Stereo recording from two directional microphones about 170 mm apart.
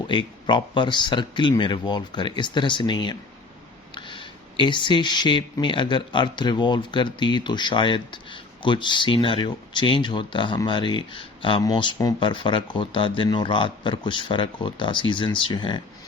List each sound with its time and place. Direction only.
0.1 s speech: 25° left (ahead or behind)